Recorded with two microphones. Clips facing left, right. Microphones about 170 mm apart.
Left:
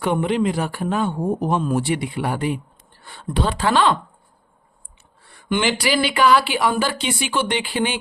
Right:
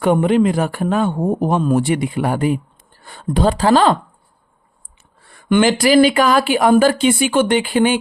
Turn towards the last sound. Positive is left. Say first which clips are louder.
# right 8 dB
turn(degrees=-50)  # may be behind; listen again after turning